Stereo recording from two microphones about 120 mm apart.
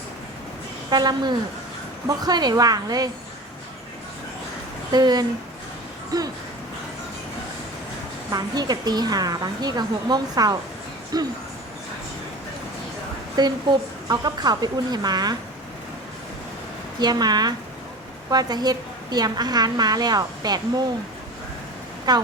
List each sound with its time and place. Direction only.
0.9 s a woman's voice: 35° right (ahead or behind)
4.9 s a woman's voice: 35° right (ahead or behind)
8.3 s a woman's voice: 35° right (ahead or behind)
13.3 s a woman's voice: 35° right (ahead or behind)
17.0 s a woman's voice: 35° right (ahead or behind)
22.1 s a woman's voice: 35° right (ahead or behind)